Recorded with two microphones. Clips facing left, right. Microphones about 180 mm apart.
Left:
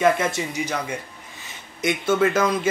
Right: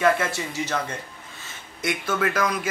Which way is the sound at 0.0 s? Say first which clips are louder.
Left 2 dB; 20° left (ahead or behind).